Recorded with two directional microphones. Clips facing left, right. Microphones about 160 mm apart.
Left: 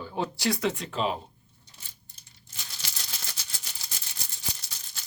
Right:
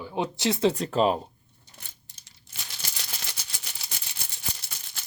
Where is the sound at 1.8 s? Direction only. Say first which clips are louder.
Right 5 dB; 90° right.